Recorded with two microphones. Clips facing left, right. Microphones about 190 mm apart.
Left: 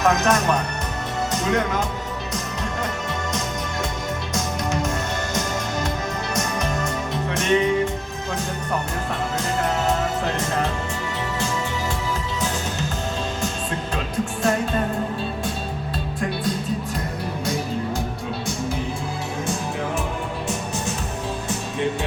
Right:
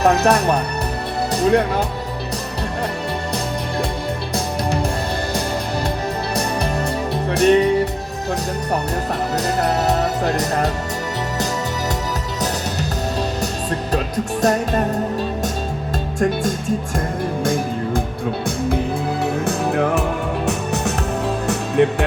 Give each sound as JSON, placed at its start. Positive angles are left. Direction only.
{"t": 0.0, "sound": "speech", "side_deg": -35}
{"t": 4.4, "sound": "music", "side_deg": -35}
{"t": 6.3, "sound": "music", "side_deg": -35}
{"t": 9.6, "sound": "speech", "side_deg": -40}
{"t": 14.4, "sound": "speech", "side_deg": -40}
{"t": 16.4, "sound": "music", "side_deg": -45}
{"t": 19.2, "sound": "music", "side_deg": -65}
{"t": 21.4, "sound": "music", "side_deg": -65}